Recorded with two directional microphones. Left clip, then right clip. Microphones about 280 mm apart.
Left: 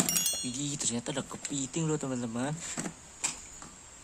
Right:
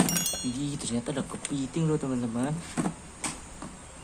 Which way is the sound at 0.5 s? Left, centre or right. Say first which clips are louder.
Right 2 dB; left.